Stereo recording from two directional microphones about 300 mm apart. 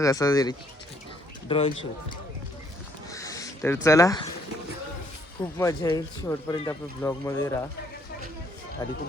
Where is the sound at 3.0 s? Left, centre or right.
Centre.